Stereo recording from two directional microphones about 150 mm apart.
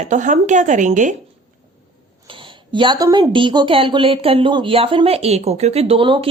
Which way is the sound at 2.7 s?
30° right (ahead or behind).